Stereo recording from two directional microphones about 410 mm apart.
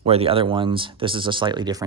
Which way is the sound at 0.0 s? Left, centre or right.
Centre.